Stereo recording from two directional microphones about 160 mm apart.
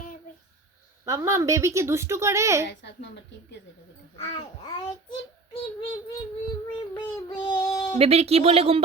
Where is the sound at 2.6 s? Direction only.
90° left.